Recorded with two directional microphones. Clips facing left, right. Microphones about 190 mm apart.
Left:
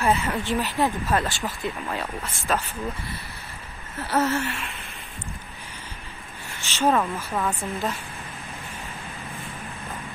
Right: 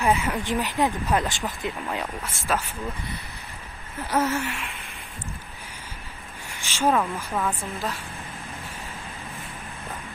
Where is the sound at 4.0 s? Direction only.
10° right (ahead or behind).